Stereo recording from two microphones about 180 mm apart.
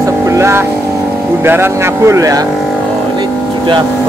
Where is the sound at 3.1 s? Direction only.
25° right (ahead or behind).